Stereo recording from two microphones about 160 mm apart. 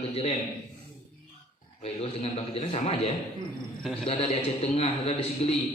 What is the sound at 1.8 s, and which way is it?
A man's voice, 40° left (ahead or behind).